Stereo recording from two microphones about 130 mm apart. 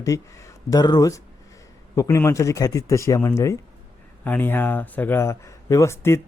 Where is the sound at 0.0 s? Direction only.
25° left (ahead or behind).